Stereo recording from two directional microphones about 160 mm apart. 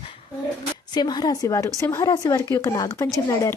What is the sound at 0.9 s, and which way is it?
Speech, 25° left (ahead or behind).